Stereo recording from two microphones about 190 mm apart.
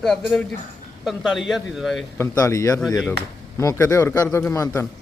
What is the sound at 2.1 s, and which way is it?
A man's voice, 15° left (ahead or behind).